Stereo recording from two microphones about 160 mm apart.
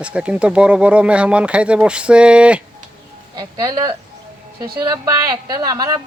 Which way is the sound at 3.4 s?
25° right (ahead or behind).